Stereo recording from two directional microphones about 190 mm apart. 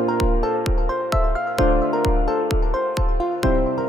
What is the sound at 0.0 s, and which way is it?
Music, centre (ahead or behind).